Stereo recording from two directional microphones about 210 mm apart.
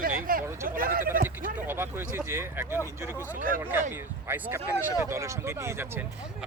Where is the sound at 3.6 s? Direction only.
10° right (ahead or behind).